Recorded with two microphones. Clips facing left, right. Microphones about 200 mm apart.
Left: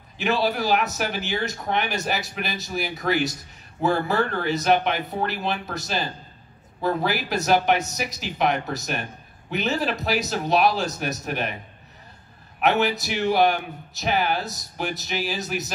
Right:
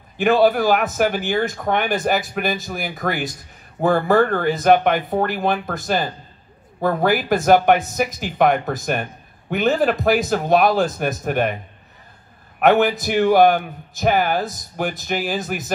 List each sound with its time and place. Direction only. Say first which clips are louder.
0.2 s a man's voice: right 8 dB; 50° right (ahead or behind)
12.5 s a man's voice: right 6 dB; 50° right (ahead or behind)